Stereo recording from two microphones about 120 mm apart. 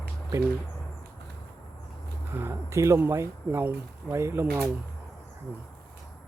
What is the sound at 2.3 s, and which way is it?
Speech, 20° right (ahead or behind).